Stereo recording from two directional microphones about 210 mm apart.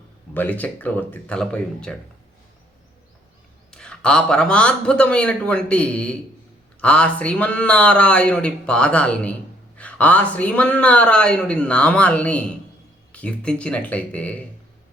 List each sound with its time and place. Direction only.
0.3 s speech: 10° left (ahead or behind)
3.7 s a man's voice: 5° left (ahead or behind)